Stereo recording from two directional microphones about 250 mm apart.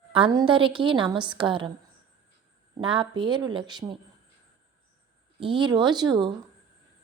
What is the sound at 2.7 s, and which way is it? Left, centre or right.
A woman's voice, centre.